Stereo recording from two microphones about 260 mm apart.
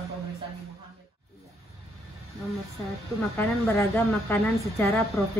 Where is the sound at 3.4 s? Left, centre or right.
Centre.